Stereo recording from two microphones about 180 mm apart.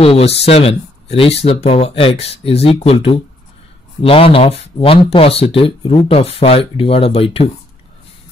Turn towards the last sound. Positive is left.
turn(degrees=35)  # may be behind; listen again after turning